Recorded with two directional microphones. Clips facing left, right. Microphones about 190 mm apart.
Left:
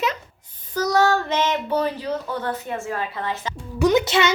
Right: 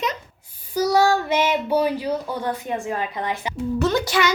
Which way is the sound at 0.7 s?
10° right (ahead or behind).